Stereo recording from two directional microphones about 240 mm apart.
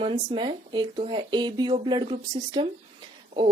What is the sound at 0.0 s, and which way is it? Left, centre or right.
Speech, right.